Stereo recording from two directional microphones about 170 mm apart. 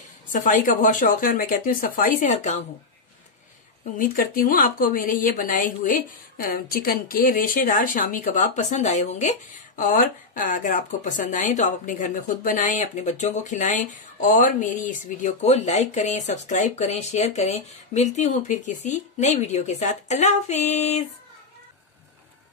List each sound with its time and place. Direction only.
0.3 s speech: 50° left (ahead or behind)
4.0 s speech: 55° left (ahead or behind)